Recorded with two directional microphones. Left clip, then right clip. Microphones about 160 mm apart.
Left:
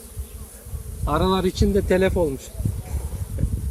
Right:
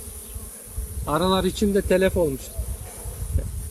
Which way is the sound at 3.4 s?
45° left (ahead or behind).